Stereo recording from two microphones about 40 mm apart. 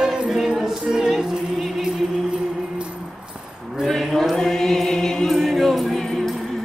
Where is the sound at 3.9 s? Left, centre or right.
Centre.